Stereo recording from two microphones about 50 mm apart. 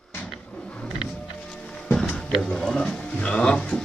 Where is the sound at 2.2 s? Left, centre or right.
Centre.